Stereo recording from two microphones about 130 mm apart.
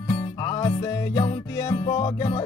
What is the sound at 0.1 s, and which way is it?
Music, 30° left (ahead or behind).